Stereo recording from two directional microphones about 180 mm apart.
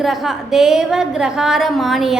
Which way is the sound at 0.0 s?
Centre (ahead or behind).